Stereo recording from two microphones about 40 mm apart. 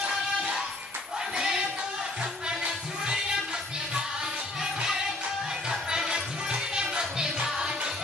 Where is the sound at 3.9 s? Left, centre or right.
Centre.